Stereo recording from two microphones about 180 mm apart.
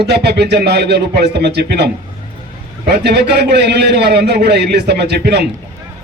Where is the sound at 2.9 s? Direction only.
65° right (ahead or behind).